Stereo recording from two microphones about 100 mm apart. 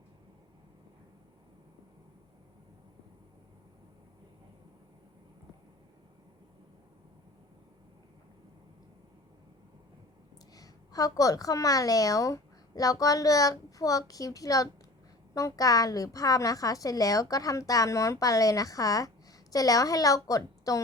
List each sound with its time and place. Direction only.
10.5 s a woman's voice: 35° left (ahead or behind)